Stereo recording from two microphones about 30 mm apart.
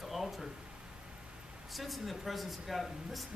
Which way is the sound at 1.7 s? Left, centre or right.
Centre.